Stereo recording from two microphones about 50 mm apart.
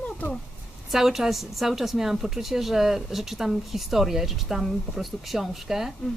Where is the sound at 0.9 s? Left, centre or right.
Centre.